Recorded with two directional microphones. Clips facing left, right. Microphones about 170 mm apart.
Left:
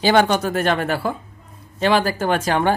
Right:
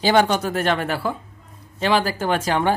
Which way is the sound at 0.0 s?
65° left (ahead or behind).